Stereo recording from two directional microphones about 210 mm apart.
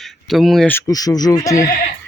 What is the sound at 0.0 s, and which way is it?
Speech, centre (ahead or behind).